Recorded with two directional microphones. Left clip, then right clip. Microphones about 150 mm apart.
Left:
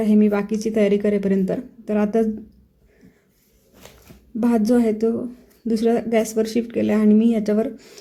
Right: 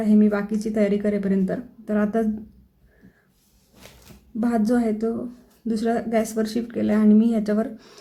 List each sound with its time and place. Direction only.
0.0 s speech: 15° left (ahead or behind)
4.4 s speech: 15° left (ahead or behind)